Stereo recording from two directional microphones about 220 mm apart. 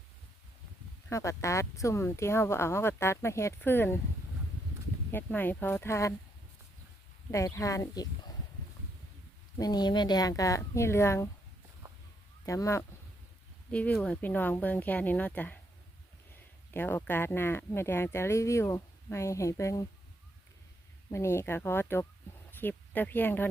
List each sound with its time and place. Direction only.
1.1 s speech: 15° left (ahead or behind)
5.1 s speech: 10° left (ahead or behind)
7.3 s speech: 15° left (ahead or behind)
9.6 s speech: 20° left (ahead or behind)
12.5 s speech: 15° left (ahead or behind)
21.1 s speech: 10° left (ahead or behind)